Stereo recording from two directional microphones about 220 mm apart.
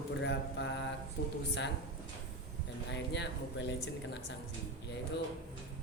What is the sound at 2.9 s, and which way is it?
A woman's voice, 50° left (ahead or behind).